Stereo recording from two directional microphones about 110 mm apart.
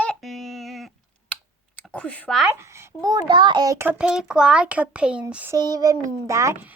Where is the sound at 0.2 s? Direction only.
Centre (ahead or behind).